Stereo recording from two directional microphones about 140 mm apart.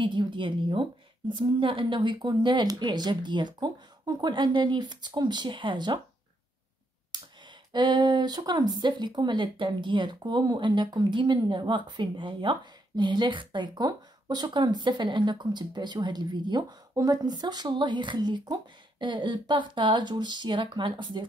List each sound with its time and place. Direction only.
0.0 s speech: 35° right (ahead or behind)
7.1 s a sound: 30° right (ahead or behind)
7.7 s speech: 35° right (ahead or behind)